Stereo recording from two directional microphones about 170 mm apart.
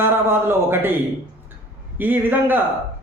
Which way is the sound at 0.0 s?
15° right (ahead or behind).